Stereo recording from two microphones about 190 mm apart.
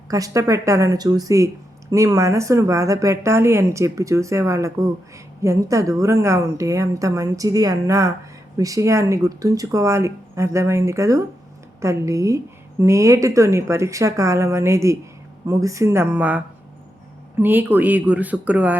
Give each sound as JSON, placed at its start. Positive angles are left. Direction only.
{"t": 0.1, "sound": "speech", "side_deg": -15}